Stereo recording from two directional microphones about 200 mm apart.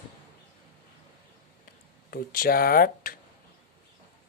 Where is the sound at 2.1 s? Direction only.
45° left (ahead or behind).